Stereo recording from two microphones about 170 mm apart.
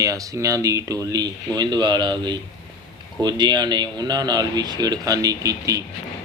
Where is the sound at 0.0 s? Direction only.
20° right (ahead or behind).